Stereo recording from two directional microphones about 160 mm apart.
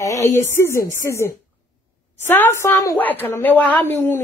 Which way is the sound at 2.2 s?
15° left (ahead or behind).